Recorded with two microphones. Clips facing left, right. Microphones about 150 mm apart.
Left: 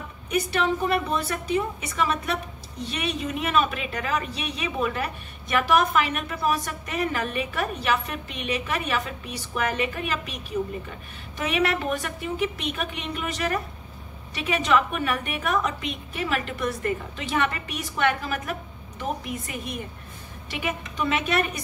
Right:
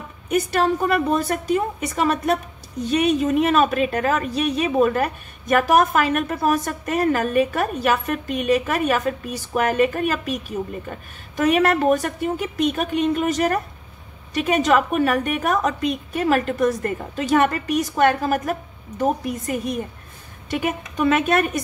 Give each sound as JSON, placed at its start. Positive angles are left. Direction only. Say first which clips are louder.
{"t": 0.3, "sound": "a woman's voice", "louder": "right 5 dB", "side_deg": -45}